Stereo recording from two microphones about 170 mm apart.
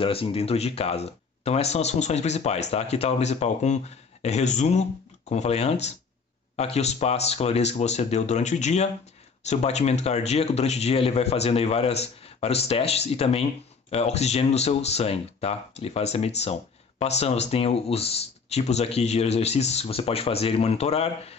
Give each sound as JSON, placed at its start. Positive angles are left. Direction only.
{"t": 0.0, "sound": "speech", "side_deg": 35}